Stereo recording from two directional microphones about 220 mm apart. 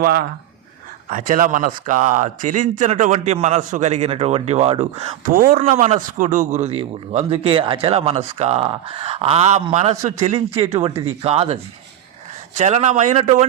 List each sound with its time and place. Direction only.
0.0 s a man's voice: 45° right (ahead or behind)